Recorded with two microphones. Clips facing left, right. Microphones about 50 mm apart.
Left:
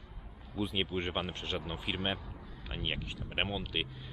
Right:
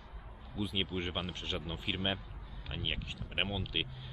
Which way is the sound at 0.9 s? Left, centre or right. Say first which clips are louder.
Left 3 dB; centre.